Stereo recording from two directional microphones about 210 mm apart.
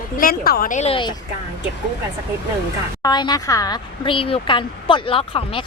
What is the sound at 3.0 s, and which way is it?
Speech, 20° left (ahead or behind).